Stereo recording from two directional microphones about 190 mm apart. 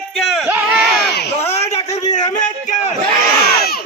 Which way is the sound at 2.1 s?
40° left (ahead or behind).